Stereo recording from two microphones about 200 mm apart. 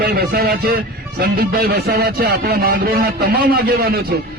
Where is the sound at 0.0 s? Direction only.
50° right (ahead or behind).